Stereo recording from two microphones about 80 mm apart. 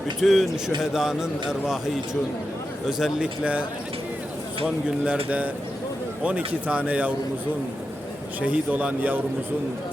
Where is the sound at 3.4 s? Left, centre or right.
Centre.